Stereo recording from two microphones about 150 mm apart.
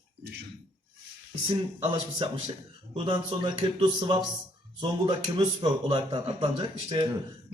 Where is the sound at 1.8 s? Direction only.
35° right (ahead or behind).